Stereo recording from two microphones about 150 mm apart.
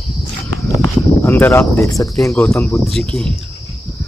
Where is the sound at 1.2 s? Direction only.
15° left (ahead or behind).